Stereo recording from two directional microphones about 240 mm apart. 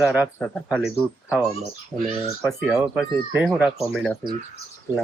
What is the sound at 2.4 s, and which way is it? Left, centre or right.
Speech, centre.